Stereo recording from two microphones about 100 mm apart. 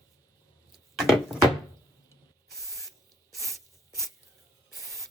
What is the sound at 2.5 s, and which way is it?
Spray, centre (ahead or behind).